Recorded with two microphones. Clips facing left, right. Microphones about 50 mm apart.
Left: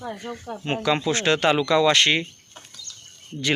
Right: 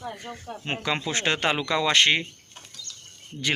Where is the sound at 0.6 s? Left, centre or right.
Centre.